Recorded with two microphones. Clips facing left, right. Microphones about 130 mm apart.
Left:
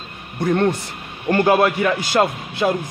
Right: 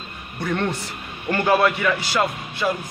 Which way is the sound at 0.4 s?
40° left (ahead or behind).